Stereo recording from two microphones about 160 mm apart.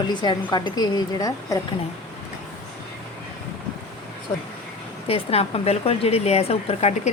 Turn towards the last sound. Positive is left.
turn(degrees=40)  # may be behind; listen again after turning